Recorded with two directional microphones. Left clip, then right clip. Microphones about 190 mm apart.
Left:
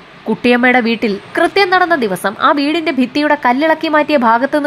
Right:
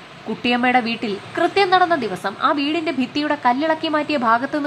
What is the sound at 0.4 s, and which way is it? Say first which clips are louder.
Speech: left 6 dB; 25° left (ahead or behind).